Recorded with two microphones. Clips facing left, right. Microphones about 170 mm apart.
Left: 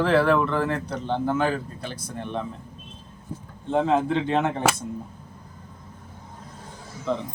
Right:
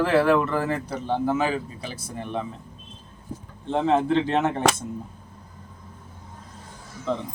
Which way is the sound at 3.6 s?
Centre (ahead or behind).